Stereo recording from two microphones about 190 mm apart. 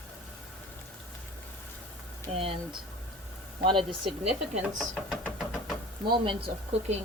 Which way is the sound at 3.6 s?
25° right (ahead or behind).